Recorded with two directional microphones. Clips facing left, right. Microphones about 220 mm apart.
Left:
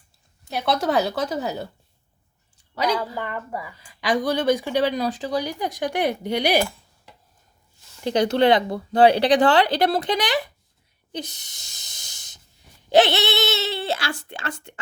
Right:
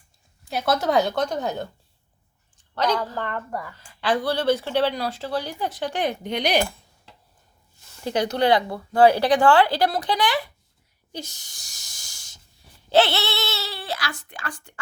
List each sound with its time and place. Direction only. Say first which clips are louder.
0.5 s a woman's voice: right 1 dB; centre (ahead or behind)
8.0 s speech: left 3 dB; 25° left (ahead or behind)
11.3 s hiss: left 2 dB; 20° left (ahead or behind)
12.9 s speech: left 2 dB; 20° left (ahead or behind)